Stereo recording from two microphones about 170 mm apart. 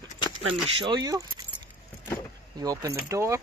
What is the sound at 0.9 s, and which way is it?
Speech, 20° right (ahead or behind).